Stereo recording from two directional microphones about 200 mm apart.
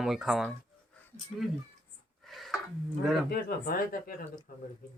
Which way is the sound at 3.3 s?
50° left (ahead or behind).